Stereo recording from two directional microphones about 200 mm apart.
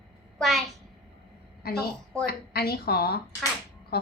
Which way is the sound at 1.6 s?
50° left (ahead or behind).